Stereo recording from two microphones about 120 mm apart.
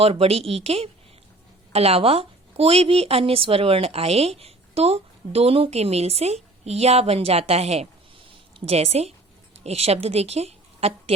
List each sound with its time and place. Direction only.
0.0 s a woman's voice: 55° right (ahead or behind)